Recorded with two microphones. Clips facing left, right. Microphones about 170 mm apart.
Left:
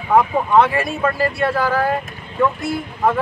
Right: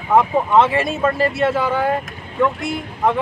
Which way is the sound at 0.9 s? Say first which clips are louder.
Right 1 dB; 20° right (ahead or behind).